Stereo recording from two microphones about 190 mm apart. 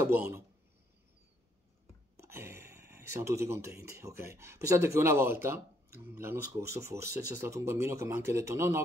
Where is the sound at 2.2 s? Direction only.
15° right (ahead or behind).